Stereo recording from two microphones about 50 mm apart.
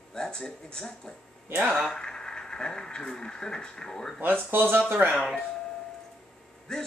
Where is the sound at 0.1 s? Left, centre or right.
Centre.